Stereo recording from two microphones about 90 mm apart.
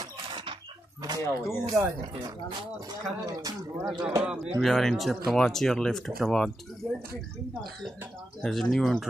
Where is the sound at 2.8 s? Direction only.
40° right (ahead or behind).